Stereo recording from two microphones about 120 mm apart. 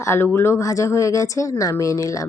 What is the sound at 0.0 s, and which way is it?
Speech, 20° left (ahead or behind).